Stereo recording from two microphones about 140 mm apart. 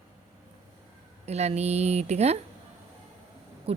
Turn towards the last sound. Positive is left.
turn(degrees=-45)  # may be behind; listen again after turning